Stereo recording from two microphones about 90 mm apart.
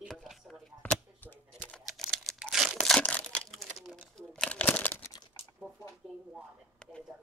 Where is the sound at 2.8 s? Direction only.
10° left (ahead or behind).